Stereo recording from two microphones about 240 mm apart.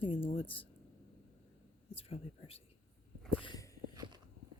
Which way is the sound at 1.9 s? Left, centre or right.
Left.